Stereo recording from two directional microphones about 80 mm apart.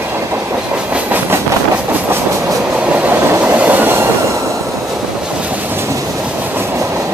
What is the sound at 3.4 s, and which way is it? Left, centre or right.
Train, centre.